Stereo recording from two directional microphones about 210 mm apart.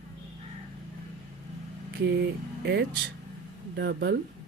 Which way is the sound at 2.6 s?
55° right (ahead or behind).